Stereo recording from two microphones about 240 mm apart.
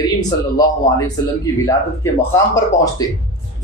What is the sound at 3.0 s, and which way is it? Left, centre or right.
Speech, centre.